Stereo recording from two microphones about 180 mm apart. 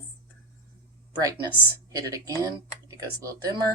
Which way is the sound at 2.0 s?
20° right (ahead or behind).